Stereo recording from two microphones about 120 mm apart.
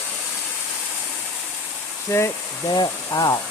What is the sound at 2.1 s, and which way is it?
Speech, 25° left (ahead or behind).